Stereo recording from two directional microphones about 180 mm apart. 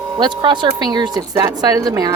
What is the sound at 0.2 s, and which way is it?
A woman's voice, 25° right (ahead or behind).